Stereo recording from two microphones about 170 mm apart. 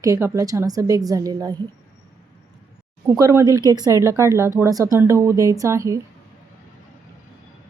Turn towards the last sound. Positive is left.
turn(degrees=-15)  # may be behind; listen again after turning